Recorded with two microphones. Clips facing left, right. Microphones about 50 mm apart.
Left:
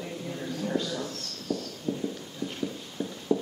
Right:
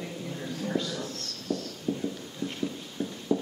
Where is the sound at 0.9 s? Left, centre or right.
Centre.